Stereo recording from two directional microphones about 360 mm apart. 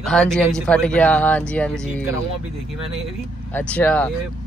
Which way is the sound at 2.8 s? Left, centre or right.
Centre.